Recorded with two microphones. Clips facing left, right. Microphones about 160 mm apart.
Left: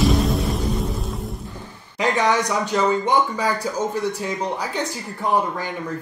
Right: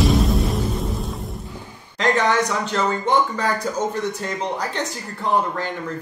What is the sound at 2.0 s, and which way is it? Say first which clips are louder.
Speech: right 1 dB; 10° left (ahead or behind).